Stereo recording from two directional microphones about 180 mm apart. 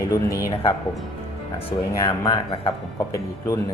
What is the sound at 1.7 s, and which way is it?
Speech, 20° left (ahead or behind).